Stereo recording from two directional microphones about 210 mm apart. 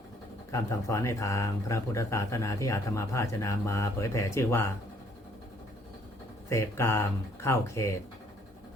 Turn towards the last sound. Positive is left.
turn(degrees=15)  # may be behind; listen again after turning